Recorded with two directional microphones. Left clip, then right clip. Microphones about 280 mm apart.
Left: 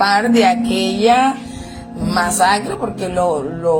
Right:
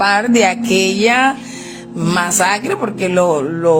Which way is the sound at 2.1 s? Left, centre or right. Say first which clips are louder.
Even; right.